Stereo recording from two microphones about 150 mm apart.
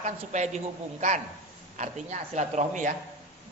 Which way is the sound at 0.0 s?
50° right (ahead or behind).